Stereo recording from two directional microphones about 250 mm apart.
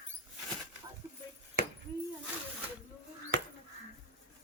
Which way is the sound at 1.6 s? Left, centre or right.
Right.